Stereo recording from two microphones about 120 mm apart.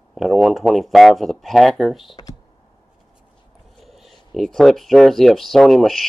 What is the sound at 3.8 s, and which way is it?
Speech, centre (ahead or behind).